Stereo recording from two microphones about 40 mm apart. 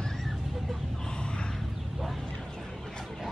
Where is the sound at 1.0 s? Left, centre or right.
Left.